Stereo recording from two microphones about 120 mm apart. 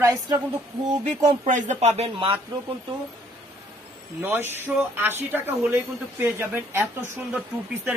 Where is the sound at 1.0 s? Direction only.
90° right; by 2.4 s 50° right (ahead or behind).